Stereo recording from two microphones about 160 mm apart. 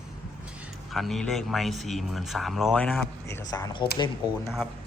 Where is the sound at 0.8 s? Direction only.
Centre (ahead or behind).